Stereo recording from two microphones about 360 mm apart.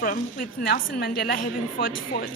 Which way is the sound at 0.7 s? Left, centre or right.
Left.